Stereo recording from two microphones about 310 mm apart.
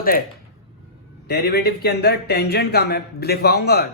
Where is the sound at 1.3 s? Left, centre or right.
Left.